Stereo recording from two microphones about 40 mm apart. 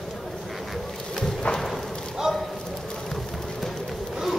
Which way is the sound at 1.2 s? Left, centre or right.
Centre.